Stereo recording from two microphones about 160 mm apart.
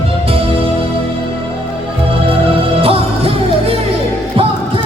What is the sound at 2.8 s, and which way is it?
Music, 35° right (ahead or behind).